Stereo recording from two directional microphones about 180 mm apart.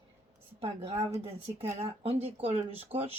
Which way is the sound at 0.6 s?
35° right (ahead or behind).